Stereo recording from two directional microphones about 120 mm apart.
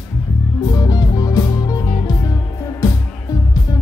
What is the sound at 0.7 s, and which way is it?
Music, 30° left (ahead or behind).